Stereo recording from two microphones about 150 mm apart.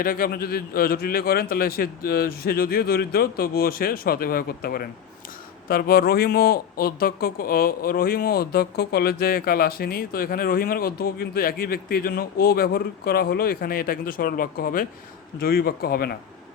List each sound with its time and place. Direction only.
0.0 s a man's voice: 75° left (ahead or behind)
15.4 s speech: 85° left